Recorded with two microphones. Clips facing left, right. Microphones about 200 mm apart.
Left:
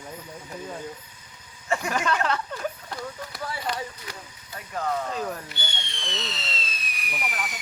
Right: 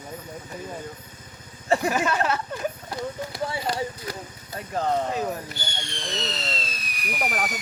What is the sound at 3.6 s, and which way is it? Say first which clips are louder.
Speech: right 4 dB; 35° right (ahead or behind).